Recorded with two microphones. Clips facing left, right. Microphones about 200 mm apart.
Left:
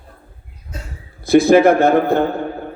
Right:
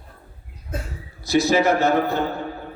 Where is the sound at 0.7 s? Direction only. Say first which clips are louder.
Right 4 dB; 55° right (ahead or behind).